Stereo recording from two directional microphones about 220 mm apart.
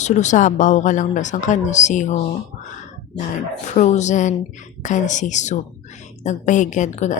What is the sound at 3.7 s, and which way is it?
A woman's voice, 30° left (ahead or behind).